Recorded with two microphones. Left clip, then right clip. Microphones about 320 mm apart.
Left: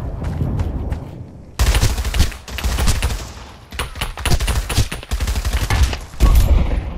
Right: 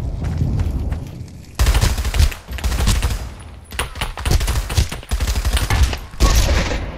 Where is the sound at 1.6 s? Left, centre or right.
Centre.